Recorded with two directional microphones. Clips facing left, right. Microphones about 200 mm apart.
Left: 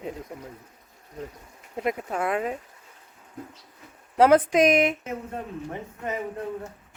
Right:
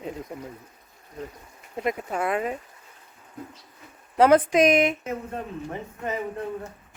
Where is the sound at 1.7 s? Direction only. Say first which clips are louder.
Even; centre (ahead or behind).